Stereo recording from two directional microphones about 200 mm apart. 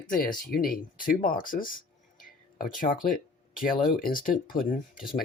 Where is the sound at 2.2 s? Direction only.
45° left (ahead or behind).